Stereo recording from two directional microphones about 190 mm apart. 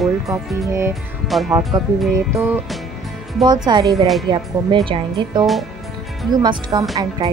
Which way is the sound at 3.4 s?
20° right (ahead or behind).